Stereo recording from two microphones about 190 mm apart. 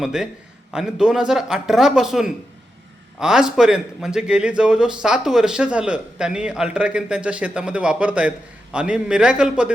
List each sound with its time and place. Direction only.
0.0 s a man's voice: 5° right (ahead or behind)